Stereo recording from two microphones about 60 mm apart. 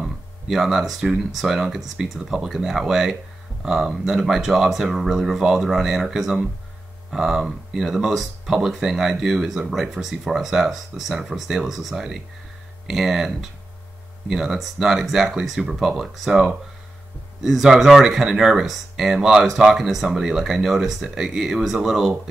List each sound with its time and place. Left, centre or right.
0.0 s speech: centre